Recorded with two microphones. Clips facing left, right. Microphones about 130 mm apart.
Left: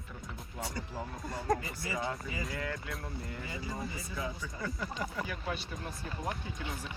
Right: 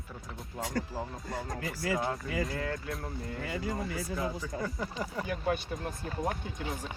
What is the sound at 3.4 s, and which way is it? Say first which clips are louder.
Speech: right 9 dB; 60° right (ahead or behind).